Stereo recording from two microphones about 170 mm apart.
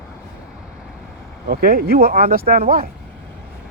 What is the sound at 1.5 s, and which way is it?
Speech, 60° right (ahead or behind).